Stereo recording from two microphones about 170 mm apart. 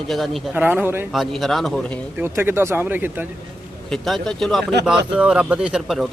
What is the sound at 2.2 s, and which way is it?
Speech, 15° right (ahead or behind).